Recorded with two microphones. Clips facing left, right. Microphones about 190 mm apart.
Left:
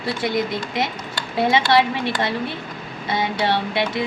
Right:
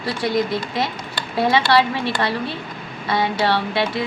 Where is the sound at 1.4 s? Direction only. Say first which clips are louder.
Even; 20° left (ahead or behind).